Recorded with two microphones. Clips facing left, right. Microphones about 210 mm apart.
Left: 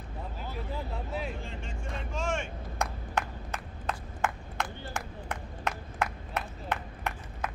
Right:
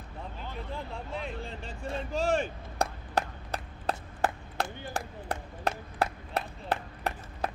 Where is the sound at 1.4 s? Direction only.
35° right (ahead or behind).